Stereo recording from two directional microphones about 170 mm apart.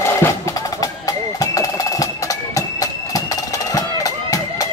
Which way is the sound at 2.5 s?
20° left (ahead or behind).